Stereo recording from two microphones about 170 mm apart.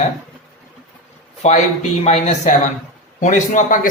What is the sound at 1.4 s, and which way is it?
A man's voice, 45° left (ahead or behind).